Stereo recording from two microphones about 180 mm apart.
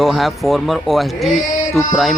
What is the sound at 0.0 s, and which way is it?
Speech, centre (ahead or behind).